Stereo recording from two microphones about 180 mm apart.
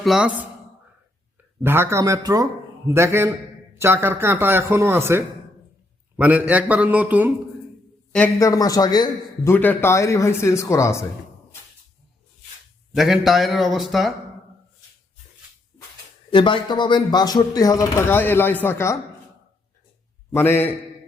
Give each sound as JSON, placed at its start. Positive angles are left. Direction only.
{"t": 0.0, "sound": "a man's voice", "side_deg": -5}
{"t": 1.6, "sound": "speech", "side_deg": -10}
{"t": 8.4, "sound": "a man's voice", "side_deg": 20}
{"t": 12.9, "sound": "a man's voice", "side_deg": 0}
{"t": 16.3, "sound": "speech", "side_deg": 30}
{"t": 20.3, "sound": "a man's voice", "side_deg": 10}